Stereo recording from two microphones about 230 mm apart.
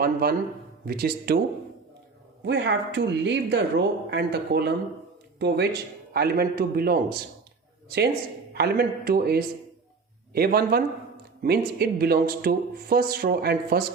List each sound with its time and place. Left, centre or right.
0.0 s speech: right
2.4 s speech: right